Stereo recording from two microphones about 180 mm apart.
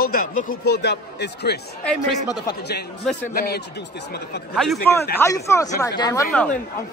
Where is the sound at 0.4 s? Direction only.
65° left (ahead or behind).